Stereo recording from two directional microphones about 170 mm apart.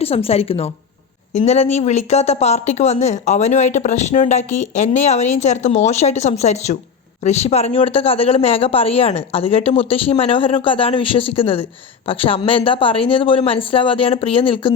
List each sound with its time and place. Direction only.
0.0 s speech: 35° left (ahead or behind)